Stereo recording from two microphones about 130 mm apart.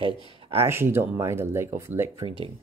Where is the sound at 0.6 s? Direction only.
20° right (ahead or behind).